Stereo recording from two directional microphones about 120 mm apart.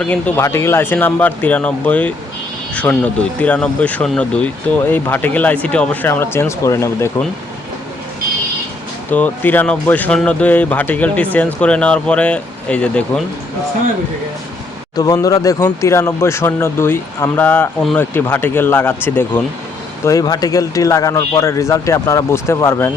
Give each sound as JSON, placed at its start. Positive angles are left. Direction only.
{"t": 0.0, "sound": "speech", "side_deg": 10}
{"t": 0.4, "sound": "a man's voice", "side_deg": 20}
{"t": 9.0, "sound": "speech", "side_deg": 15}
{"t": 14.9, "sound": "a man's voice", "side_deg": 30}
{"t": 20.1, "sound": "a man's voice", "side_deg": 30}